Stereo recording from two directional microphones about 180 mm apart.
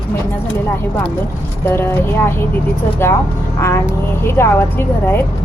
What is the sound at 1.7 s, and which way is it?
Speech, 15° left (ahead or behind).